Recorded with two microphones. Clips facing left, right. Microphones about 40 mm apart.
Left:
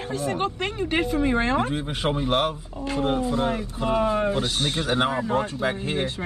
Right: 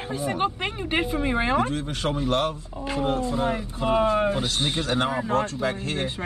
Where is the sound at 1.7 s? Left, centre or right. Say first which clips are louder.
Left 1 dB; centre.